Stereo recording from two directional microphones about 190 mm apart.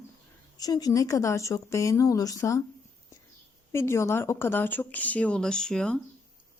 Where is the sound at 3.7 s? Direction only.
15° left (ahead or behind).